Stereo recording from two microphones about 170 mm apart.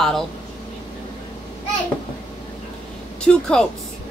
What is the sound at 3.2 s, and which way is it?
Speech, 5° left (ahead or behind).